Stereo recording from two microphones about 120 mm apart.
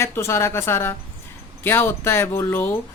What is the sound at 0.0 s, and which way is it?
Speech, 20° left (ahead or behind).